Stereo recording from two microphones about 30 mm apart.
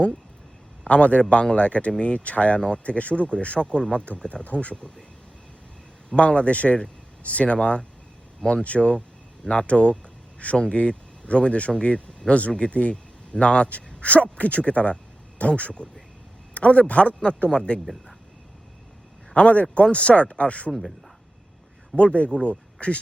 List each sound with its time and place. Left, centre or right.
0.9 s speech: left
2.6 s a man's voice: left
2.8 s speech: left
3.9 s speech: left
6.1 s speech: left
17.5 s a man's voice: left
19.3 s speech: left
21.9 s speech: left